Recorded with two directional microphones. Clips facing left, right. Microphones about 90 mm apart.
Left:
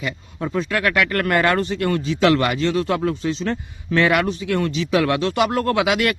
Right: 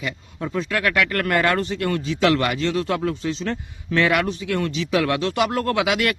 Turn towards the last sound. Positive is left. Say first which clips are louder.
# left 2 dB
turn(degrees=25)  # may be behind; listen again after turning